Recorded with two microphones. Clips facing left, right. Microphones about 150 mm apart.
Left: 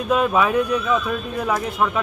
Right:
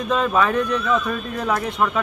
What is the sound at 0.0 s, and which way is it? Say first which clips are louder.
Speech: left 1 dB; 10° left (ahead or behind).